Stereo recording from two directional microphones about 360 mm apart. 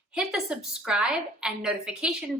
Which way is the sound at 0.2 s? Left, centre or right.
Centre.